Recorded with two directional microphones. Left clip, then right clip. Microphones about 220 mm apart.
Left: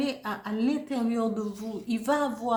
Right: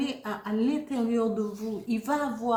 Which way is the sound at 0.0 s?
40° left (ahead or behind).